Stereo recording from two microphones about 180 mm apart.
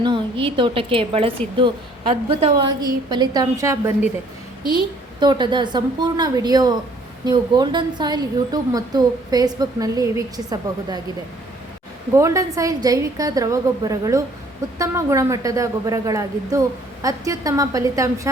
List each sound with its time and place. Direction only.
0.0 s a woman's voice: 30° right (ahead or behind)
5.2 s a woman's voice: 25° right (ahead or behind)
12.1 s a woman's voice: 15° right (ahead or behind)